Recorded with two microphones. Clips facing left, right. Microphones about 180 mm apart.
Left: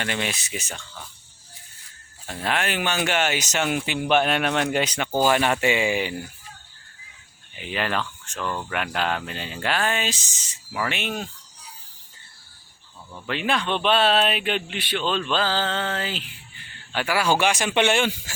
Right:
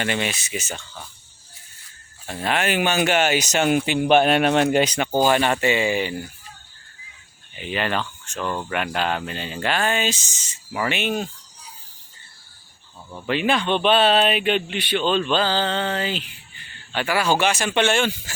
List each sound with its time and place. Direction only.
0.0 s speech: 5° right (ahead or behind)
2.2 s speech: centre (ahead or behind)
3.1 s a man's voice: 40° right (ahead or behind)
5.2 s speech: centre (ahead or behind)
7.5 s speech: centre (ahead or behind)
13.2 s speech: 5° right (ahead or behind); by 18.3 s 15° left (ahead or behind)